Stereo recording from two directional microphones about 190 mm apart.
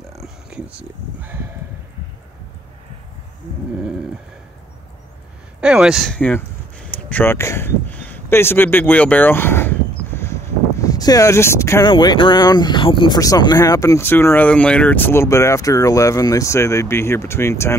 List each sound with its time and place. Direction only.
0.2 s a sound: 5° right (ahead or behind)
0.7 s speech: 10° right (ahead or behind)
5.6 s speech: 5° right (ahead or behind); by 17.7 s 15° left (ahead or behind)